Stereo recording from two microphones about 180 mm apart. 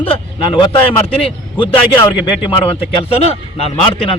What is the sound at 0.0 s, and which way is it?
A man's voice, 30° left (ahead or behind).